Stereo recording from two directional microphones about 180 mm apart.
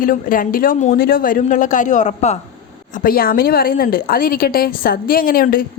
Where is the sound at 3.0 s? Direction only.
55° left (ahead or behind).